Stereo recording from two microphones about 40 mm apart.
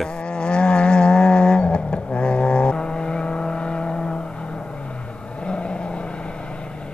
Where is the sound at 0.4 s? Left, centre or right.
Left.